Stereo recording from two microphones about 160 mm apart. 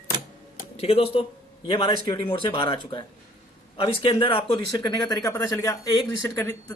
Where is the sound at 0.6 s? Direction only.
40° left (ahead or behind).